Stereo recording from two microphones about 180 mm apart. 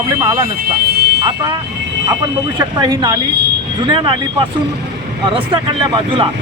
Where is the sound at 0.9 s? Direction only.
60° right (ahead or behind).